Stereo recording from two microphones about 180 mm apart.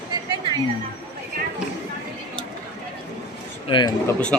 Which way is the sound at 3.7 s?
25° left (ahead or behind).